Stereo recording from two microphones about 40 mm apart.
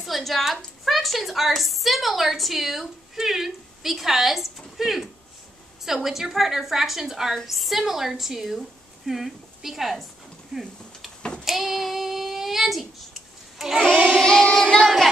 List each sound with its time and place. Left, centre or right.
0.0 s a sound: centre
0.8 s a woman's voice: centre
11.4 s child singing: centre
13.6 s a sound: centre
13.9 s child singing: right
14.2 s child singing: centre